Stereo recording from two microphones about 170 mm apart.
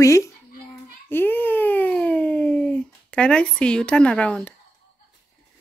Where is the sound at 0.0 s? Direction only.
15° left (ahead or behind).